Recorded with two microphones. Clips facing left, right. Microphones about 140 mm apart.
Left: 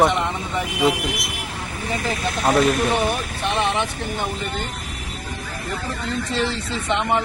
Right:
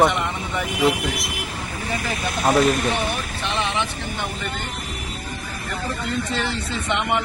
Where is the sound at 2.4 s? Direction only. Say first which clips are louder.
Even; centre (ahead or behind).